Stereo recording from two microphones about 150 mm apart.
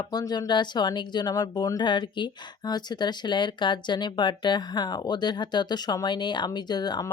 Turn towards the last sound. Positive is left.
turn(degrees=25)  # may be behind; listen again after turning